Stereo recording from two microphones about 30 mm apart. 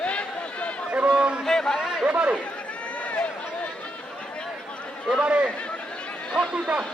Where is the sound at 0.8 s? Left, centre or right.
Right.